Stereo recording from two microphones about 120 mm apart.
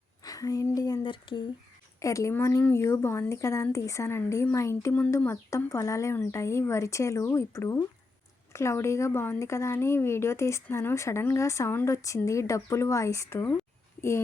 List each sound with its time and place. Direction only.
0.3 s a sound: 30° left (ahead or behind)
1.0 s speech: 45° left (ahead or behind)
2.0 s speech: 25° left (ahead or behind)